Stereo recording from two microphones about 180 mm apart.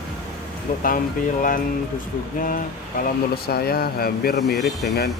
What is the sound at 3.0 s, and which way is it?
Speech, 60° left (ahead or behind).